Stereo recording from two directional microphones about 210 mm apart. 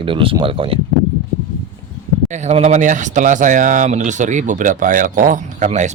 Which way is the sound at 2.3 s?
30° right (ahead or behind).